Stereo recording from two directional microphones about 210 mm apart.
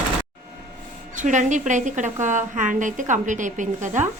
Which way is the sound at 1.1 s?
35° right (ahead or behind).